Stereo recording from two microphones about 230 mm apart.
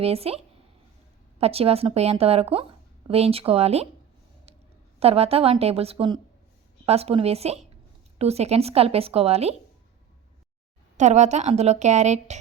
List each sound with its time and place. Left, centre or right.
0.0 s a woman's voice: right
4.9 s a woman's voice: right
10.9 s a woman's voice: right